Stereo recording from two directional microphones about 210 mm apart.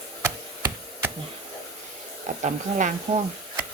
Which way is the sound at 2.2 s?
35° right (ahead or behind).